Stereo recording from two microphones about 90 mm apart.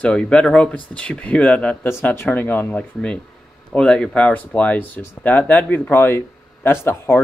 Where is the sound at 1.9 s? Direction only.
25° left (ahead or behind).